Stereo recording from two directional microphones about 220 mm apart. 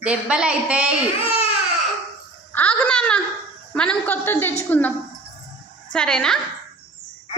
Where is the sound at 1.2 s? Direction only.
25° left (ahead or behind).